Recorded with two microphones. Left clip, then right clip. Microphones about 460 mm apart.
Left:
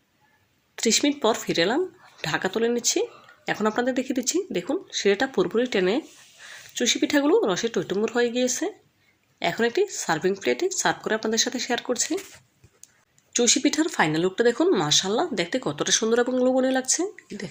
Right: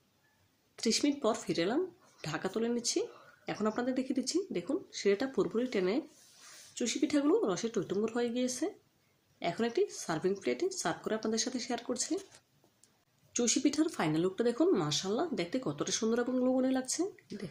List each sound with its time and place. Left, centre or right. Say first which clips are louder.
0.8 s speech: left 9 dB; left
13.3 s speech: left 9 dB; left